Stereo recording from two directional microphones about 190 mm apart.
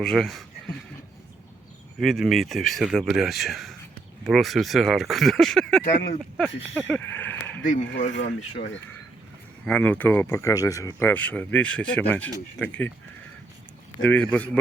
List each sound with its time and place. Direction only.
0.0 s speech: centre (ahead or behind)
2.0 s speech: centre (ahead or behind)
5.8 s speech: 50° left (ahead or behind)
6.7 s speech: 5° left (ahead or behind)
7.8 s speech: 75° left (ahead or behind)
9.6 s speech: 5° left (ahead or behind)
14.0 s speech: 5° left (ahead or behind)